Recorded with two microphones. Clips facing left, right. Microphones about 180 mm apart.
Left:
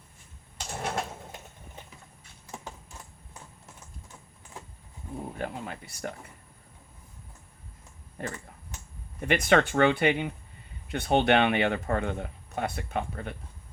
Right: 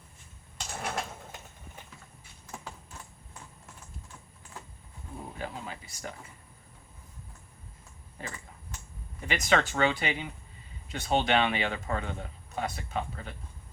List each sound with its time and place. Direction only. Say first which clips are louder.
0.7 s a sound: left 3 dB; 30° left (ahead or behind)
5.4 s speech: left 1 dB; 55° left (ahead or behind)
9.2 s speech: left 5 dB; 55° left (ahead or behind)